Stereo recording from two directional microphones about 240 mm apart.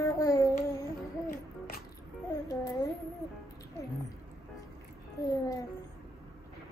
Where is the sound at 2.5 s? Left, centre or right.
Centre.